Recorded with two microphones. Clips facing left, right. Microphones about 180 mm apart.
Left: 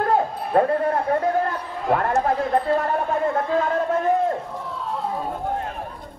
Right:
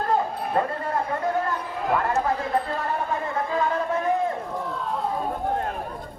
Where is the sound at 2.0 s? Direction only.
55° left (ahead or behind).